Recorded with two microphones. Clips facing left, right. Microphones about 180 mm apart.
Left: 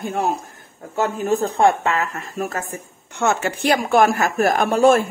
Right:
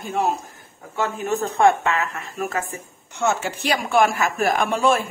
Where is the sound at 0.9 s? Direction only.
35° left (ahead or behind).